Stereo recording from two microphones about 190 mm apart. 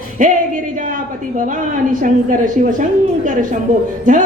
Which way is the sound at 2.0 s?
45° right (ahead or behind).